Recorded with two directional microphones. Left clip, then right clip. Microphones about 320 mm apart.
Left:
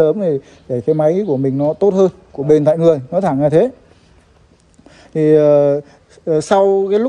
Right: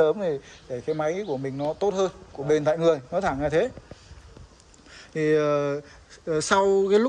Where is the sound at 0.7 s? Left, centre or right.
Left.